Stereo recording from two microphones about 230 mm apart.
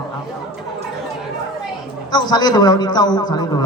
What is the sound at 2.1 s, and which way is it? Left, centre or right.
A man's voice, centre.